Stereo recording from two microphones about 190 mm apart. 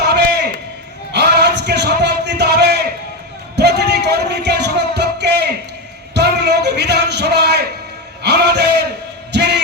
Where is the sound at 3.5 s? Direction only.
60° right (ahead or behind).